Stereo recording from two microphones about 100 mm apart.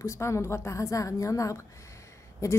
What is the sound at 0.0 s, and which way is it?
A woman's voice, 30° left (ahead or behind).